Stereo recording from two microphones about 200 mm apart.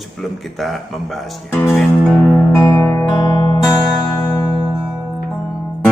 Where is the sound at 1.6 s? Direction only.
Centre (ahead or behind); by 4.6 s 15° left (ahead or behind).